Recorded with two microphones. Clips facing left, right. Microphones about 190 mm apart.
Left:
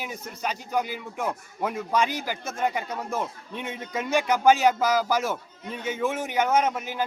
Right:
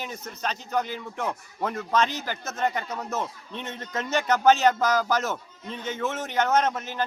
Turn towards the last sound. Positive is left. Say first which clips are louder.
# even
turn(degrees=10)  # may be behind; listen again after turning